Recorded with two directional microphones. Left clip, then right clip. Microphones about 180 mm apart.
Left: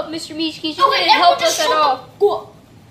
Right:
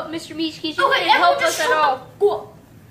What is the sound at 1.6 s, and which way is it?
Speech, 30° left (ahead or behind).